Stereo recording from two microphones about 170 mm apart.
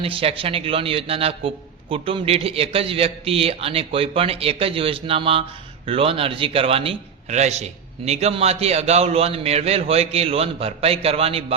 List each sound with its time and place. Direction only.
0.0 s a man's voice: 35° right (ahead or behind)